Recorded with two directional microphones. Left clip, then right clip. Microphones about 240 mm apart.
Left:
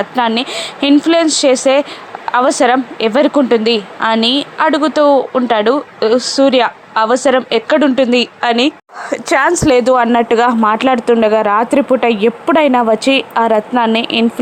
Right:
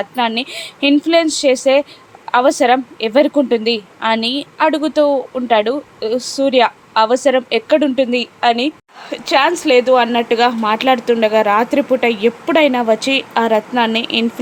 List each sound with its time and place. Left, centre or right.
0.0 s speech: centre